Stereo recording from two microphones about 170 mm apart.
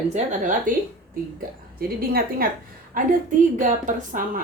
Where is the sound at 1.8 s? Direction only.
60° right (ahead or behind).